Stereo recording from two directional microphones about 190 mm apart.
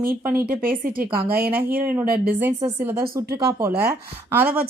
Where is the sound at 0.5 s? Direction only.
50° right (ahead or behind).